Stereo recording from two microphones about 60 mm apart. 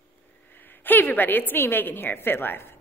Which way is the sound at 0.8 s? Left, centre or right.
Left.